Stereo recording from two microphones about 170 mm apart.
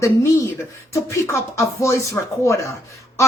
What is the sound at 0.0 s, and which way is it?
Speech, 15° left (ahead or behind).